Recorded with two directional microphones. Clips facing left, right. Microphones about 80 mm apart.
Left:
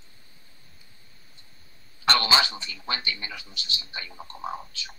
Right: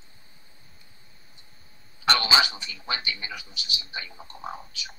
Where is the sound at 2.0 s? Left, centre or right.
Centre.